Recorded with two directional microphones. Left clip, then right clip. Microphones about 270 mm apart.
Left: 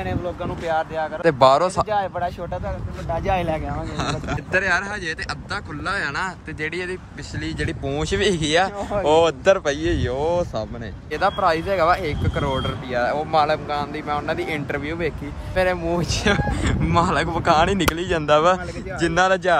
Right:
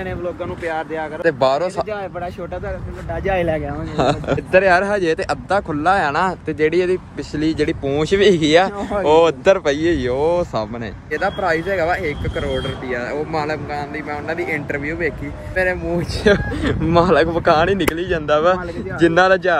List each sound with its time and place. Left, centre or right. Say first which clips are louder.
0.7 s speech: left 1 dB; centre
1.9 s speech: left 3 dB; left
3.9 s speech: right 11 dB; centre